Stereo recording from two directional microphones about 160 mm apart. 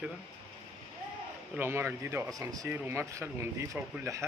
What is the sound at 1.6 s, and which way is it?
Speech, 15° right (ahead or behind).